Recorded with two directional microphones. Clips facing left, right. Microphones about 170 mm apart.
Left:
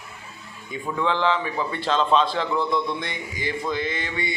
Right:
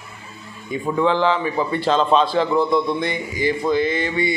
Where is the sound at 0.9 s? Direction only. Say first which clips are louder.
Right 6 dB; 35° right (ahead or behind).